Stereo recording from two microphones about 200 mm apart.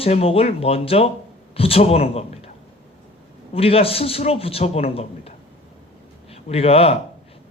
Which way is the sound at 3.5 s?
30° left (ahead or behind).